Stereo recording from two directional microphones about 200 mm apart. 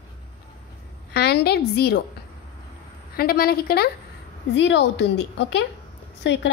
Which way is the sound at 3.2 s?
50° left (ahead or behind).